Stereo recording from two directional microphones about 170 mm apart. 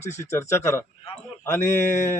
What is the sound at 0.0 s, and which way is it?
Speech, 45° left (ahead or behind).